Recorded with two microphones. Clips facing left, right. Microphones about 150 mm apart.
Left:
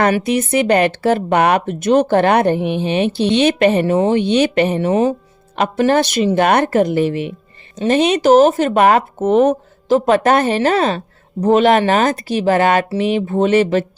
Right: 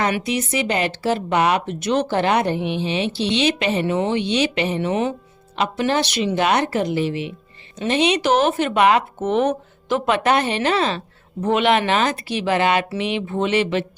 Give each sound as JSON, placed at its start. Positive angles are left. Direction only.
{"t": 0.2, "sound": "speech", "side_deg": 55}